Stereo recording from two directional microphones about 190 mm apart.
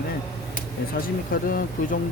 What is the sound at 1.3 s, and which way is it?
Speech, 50° left (ahead or behind).